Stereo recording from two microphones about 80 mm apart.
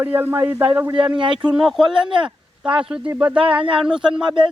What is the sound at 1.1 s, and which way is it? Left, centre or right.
Speech, right.